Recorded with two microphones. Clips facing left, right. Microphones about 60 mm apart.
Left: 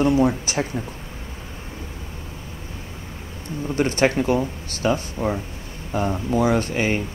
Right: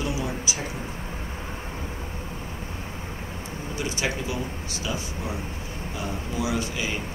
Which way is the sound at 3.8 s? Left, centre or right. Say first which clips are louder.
Left 10 dB; left.